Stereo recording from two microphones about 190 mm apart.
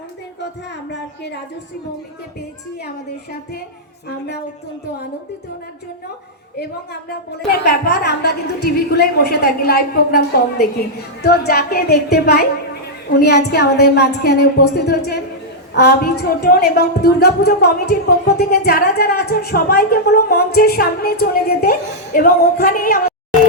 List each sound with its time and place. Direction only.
0.9 s a woman's voice: 65° left (ahead or behind)
7.6 s a woman's voice: 60° left (ahead or behind)